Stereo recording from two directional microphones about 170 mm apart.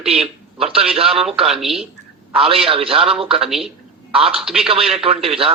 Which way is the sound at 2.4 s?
35° right (ahead or behind).